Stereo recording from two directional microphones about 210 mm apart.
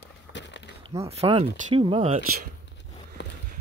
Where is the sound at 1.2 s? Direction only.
25° right (ahead or behind).